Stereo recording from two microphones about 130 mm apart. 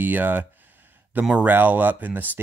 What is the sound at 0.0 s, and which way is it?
Speech, 15° right (ahead or behind).